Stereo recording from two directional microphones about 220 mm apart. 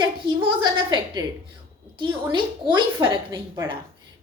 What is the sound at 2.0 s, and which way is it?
A woman's voice, 20° right (ahead or behind).